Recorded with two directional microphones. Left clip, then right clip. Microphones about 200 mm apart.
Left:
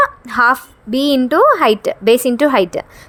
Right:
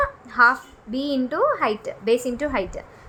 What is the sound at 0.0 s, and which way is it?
A woman's voice, 35° left (ahead or behind).